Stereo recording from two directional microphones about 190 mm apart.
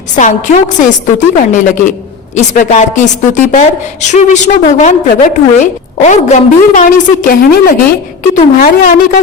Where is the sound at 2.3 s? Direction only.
40° left (ahead or behind).